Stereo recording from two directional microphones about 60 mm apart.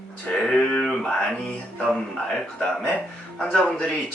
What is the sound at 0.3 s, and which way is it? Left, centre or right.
Speech, centre.